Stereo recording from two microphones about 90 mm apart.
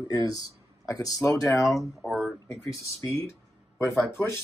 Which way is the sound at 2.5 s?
35° left (ahead or behind).